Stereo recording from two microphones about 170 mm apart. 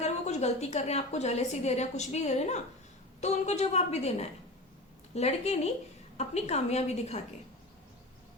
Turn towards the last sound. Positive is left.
turn(degrees=40)  # may be behind; listen again after turning